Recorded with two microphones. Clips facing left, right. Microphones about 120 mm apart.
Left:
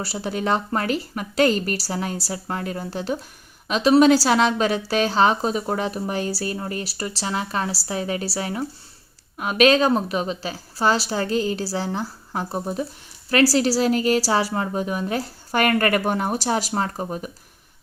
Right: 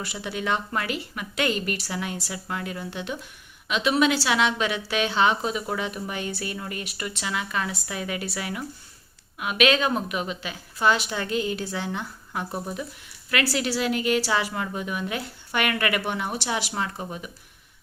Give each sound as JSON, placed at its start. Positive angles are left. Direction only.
{"t": 0.0, "sound": "a woman's voice", "side_deg": 35}